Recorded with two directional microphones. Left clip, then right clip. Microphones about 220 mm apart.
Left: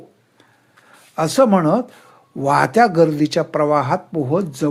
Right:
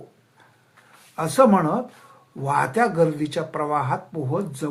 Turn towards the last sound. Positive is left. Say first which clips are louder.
# left 7 dB
turn(degrees=40)  # may be behind; listen again after turning